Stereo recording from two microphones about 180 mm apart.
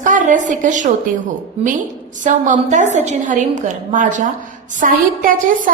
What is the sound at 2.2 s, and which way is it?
A woman's voice, 45° right (ahead or behind).